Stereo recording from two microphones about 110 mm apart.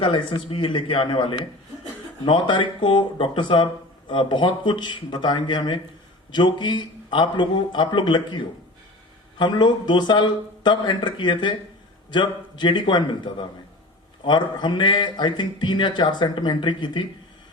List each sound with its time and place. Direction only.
0.0 s a man's voice: 50° left (ahead or behind)